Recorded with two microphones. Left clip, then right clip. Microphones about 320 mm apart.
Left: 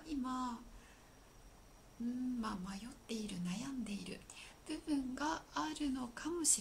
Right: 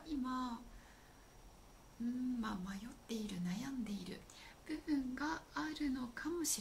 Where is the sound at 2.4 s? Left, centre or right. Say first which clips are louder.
Left 1 dB; centre.